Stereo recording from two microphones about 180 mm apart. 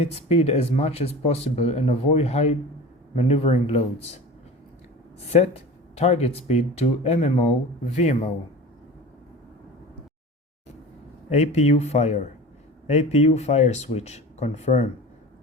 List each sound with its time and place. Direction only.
0.0 s speech: 35° left (ahead or behind)
5.3 s speech: 40° left (ahead or behind)
11.3 s speech: 40° left (ahead or behind)